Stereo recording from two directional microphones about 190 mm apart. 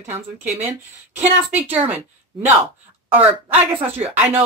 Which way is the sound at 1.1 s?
35° right (ahead or behind).